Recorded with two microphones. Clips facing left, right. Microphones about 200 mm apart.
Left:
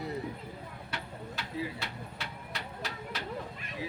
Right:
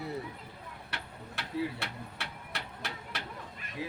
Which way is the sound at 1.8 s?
65° right (ahead or behind).